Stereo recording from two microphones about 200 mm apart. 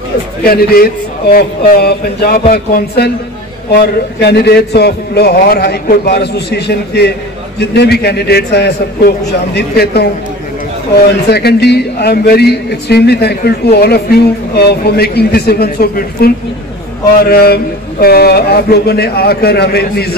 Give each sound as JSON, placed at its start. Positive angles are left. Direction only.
{"t": 0.4, "sound": "a man's voice", "side_deg": 50}
{"t": 11.1, "sound": "a man's voice", "side_deg": 55}